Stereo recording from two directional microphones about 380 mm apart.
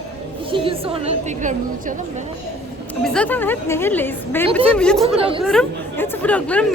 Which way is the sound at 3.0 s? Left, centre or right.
Centre.